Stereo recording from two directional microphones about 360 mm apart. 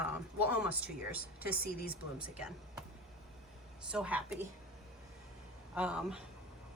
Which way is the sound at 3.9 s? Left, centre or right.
Centre.